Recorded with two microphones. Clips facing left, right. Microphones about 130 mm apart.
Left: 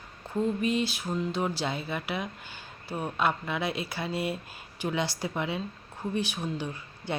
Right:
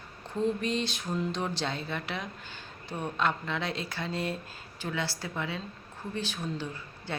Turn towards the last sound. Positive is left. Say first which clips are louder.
# left 3 dB
turn(degrees=15)  # may be behind; listen again after turning